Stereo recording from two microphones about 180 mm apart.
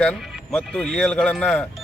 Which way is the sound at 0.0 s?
Centre (ahead or behind).